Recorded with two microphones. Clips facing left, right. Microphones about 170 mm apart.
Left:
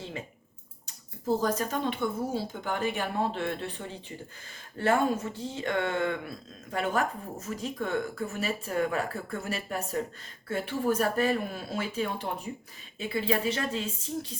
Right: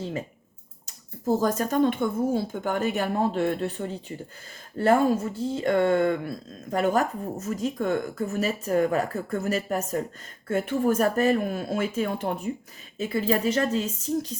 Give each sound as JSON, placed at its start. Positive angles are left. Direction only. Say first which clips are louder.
{"t": 1.2, "sound": "speech", "louder": "right 4 dB", "side_deg": -45}